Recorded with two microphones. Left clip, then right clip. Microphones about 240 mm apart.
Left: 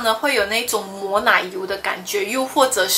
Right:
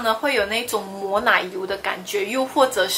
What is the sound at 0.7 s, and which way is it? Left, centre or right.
Speech, right.